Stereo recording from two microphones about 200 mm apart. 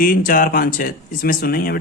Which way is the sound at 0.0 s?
45° left (ahead or behind).